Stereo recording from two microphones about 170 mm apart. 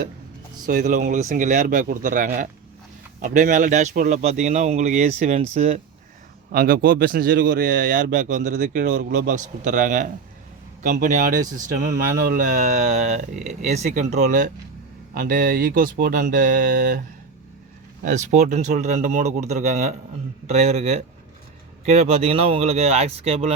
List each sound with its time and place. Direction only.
0.7 s a man's voice: 50° right (ahead or behind)
6.5 s a man's voice: 60° right (ahead or behind)
18.0 s a man's voice: 45° right (ahead or behind)